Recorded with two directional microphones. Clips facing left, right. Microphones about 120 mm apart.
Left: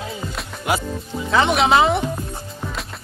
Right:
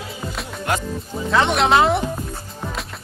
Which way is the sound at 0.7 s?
10° left (ahead or behind).